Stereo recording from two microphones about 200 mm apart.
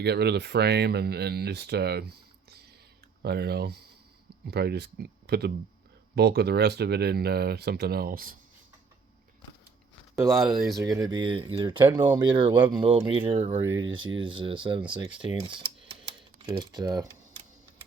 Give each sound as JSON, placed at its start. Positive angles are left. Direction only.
{"t": 0.0, "sound": "speech", "side_deg": -55}
{"t": 10.4, "sound": "speech", "side_deg": 0}
{"t": 10.8, "sound": "speech", "side_deg": -20}